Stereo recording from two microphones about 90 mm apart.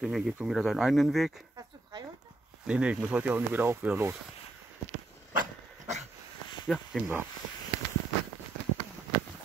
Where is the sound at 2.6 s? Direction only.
10° right (ahead or behind).